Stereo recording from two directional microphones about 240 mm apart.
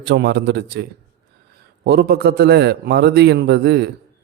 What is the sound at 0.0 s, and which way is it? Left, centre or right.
A man's voice, right.